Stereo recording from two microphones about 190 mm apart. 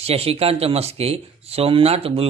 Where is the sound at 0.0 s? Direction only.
30° right (ahead or behind).